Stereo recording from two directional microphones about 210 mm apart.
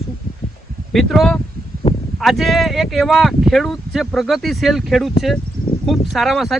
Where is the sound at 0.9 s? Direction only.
Centre (ahead or behind).